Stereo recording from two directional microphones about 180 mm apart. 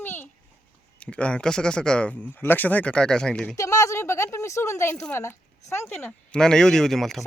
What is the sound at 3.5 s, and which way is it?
A woman's voice, 20° left (ahead or behind).